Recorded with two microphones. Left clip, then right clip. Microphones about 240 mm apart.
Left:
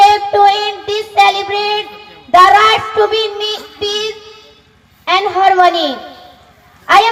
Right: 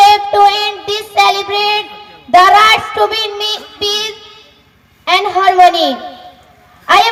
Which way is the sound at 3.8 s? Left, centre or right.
Right.